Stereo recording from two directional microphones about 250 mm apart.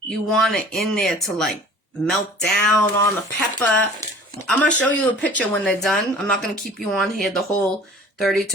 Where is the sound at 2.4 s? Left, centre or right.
Centre.